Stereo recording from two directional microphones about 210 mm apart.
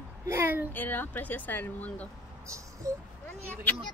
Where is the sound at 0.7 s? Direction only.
10° left (ahead or behind).